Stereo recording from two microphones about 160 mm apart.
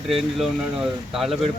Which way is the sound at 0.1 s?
Centre (ahead or behind).